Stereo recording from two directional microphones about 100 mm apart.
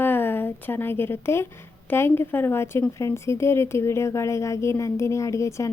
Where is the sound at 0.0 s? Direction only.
20° left (ahead or behind).